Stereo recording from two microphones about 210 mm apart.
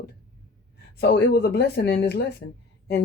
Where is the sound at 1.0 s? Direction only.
55° left (ahead or behind).